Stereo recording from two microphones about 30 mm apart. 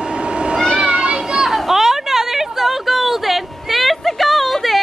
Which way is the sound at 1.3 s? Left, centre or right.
Centre.